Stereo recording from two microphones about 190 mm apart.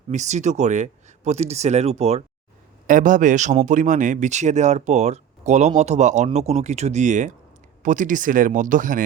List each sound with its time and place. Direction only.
0.1 s a man's voice: 40° right (ahead or behind)